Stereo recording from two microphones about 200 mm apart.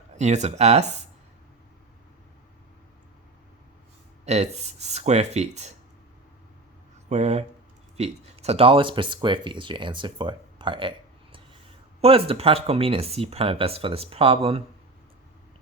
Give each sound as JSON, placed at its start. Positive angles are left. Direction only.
{"t": 0.2, "sound": "speech", "side_deg": -35}
{"t": 4.3, "sound": "speech", "side_deg": -35}
{"t": 7.1, "sound": "speech", "side_deg": -35}